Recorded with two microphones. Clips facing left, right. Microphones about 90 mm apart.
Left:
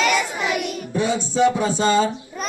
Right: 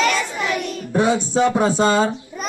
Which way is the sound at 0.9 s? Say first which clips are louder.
Right 3 dB; 50° right (ahead or behind).